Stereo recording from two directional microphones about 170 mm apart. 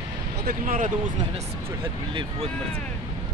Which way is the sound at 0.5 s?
50° right (ahead or behind).